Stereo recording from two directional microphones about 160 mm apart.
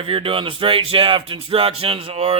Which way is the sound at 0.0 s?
35° right (ahead or behind).